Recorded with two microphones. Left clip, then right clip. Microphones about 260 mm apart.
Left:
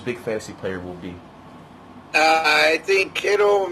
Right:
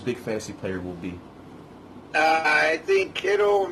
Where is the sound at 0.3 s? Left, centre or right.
Centre.